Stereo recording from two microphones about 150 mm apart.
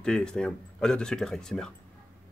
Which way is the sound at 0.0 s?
5° left (ahead or behind).